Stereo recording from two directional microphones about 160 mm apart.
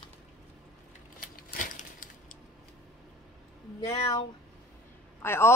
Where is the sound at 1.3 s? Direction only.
60° left (ahead or behind).